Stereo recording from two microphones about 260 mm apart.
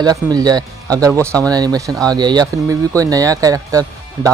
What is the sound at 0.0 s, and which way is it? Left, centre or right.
Speech, centre.